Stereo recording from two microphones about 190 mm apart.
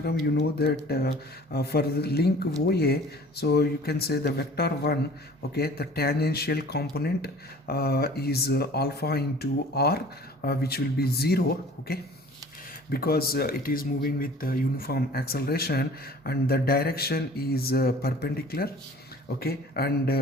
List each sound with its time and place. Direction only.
0.3 s a man's voice: 55° left (ahead or behind)